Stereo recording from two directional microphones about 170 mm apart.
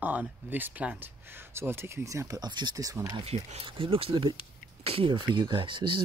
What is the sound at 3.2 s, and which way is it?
Speech, 35° right (ahead or behind).